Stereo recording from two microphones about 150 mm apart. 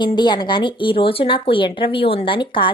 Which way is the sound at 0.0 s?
30° left (ahead or behind).